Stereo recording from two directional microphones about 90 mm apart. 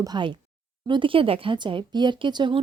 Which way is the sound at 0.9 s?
70° right (ahead or behind).